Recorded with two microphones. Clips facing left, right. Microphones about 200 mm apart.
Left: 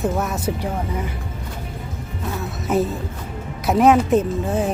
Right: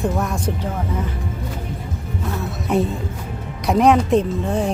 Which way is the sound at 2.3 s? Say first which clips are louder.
Even; centre (ahead or behind).